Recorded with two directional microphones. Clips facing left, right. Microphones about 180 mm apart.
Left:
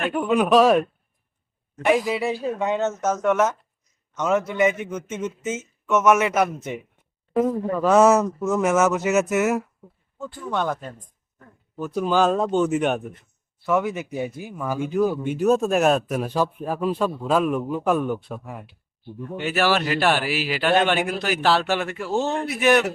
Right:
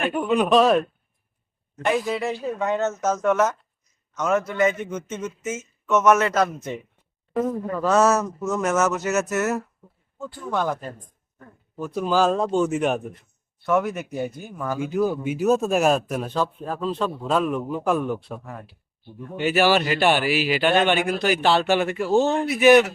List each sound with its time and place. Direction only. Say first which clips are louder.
0.0 s speech: even; 10° right (ahead or behind)
0.3 s speech: left 1 dB; 5° left (ahead or behind)
4.8 s a man's voice: even; 5° left (ahead or behind)
5.1 s speech: left 4 dB; 15° left (ahead or behind)
10.5 s a man's voice: right 1 dB; centre (ahead or behind)
16.3 s a man's voice: left 2 dB; 15° left (ahead or behind); by 22.9 s 5° right (ahead or behind)